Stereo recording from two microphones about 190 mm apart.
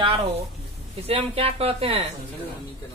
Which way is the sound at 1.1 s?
30° right (ahead or behind).